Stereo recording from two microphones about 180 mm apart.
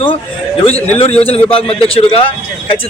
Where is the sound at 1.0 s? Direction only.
35° left (ahead or behind).